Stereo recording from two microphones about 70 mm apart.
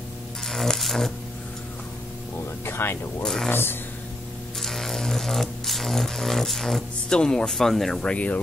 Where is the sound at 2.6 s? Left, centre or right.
Left.